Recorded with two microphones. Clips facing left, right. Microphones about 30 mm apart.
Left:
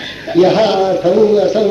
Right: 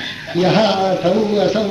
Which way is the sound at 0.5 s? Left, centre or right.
Centre.